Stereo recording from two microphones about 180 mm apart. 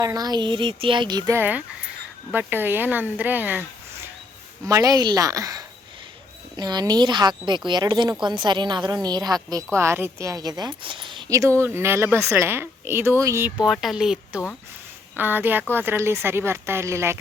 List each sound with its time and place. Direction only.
0.0 s speech: 20° right (ahead or behind)
1.4 s a woman's voice: 10° right (ahead or behind)
13.6 s a woman's voice: centre (ahead or behind)